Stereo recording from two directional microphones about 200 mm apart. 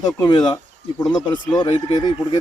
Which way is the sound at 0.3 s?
20° left (ahead or behind).